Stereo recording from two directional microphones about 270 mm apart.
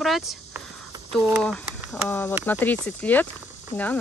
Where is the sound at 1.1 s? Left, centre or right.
Centre.